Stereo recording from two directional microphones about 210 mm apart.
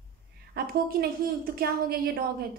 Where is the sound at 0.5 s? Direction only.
45° right (ahead or behind).